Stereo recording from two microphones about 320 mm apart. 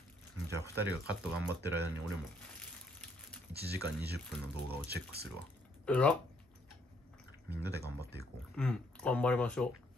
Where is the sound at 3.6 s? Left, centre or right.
Right.